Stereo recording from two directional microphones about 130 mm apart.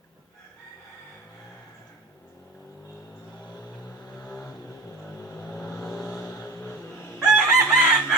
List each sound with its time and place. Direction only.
4.3 s vehicle: 5° left (ahead or behind)
6.3 s a sound: 15° left (ahead or behind)
7.2 s chicken: 5° right (ahead or behind)